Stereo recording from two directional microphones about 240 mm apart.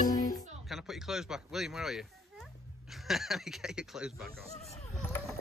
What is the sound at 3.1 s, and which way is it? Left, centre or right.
Speech, centre.